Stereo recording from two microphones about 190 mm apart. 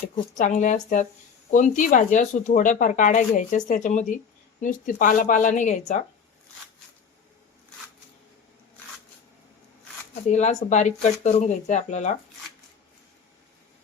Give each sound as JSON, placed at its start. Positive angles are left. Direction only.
{"t": 0.3, "sound": "speech", "side_deg": 40}
{"t": 10.3, "sound": "speech", "side_deg": 35}